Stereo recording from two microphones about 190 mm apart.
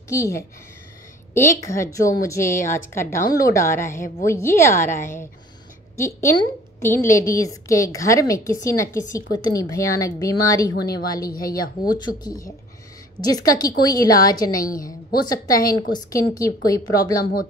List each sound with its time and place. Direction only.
0.1 s a woman's voice: 15° left (ahead or behind)
14.5 s a woman's voice: 45° left (ahead or behind)
14.9 s a woman's voice: 20° left (ahead or behind)
17.2 s a woman's voice: 50° left (ahead or behind)